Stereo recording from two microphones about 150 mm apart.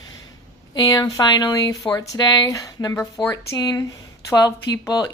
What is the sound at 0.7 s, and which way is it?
Speech, 25° left (ahead or behind).